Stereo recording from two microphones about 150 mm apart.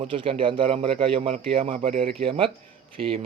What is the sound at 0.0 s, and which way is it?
Speech, 35° right (ahead or behind).